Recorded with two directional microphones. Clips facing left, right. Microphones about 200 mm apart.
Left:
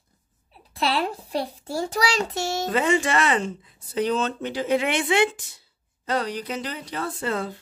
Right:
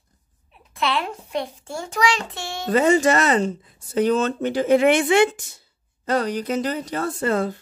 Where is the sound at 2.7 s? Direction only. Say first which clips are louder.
Right 6 dB; 40° right (ahead or behind).